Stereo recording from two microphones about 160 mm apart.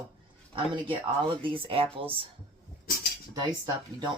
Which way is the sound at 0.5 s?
35° right (ahead or behind).